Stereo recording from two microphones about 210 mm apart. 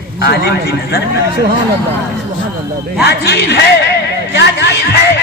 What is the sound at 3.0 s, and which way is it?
Speech, 50° left (ahead or behind).